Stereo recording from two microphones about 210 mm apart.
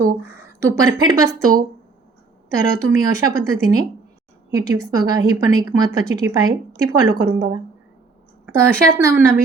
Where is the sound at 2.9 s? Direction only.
15° right (ahead or behind).